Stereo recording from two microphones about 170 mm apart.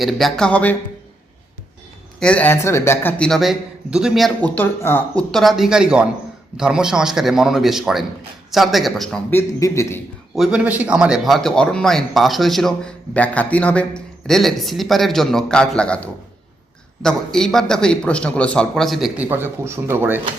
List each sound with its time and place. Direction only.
0.0 s speech: centre (ahead or behind)
2.1 s speech: 5° left (ahead or behind)
9.3 s a man's voice: 15° left (ahead or behind)
10.3 s speech: 5° right (ahead or behind)